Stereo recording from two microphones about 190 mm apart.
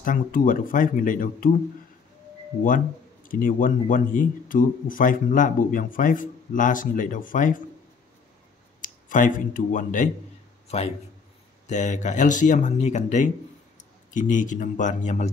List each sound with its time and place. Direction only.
0.0 s speech: 45° left (ahead or behind)
3.3 s speech: 45° left (ahead or behind)
8.8 s speech: 45° left (ahead or behind)
11.6 s speech: 40° left (ahead or behind)